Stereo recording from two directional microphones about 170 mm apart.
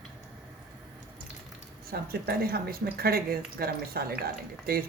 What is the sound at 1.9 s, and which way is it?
Speech, 65° right (ahead or behind).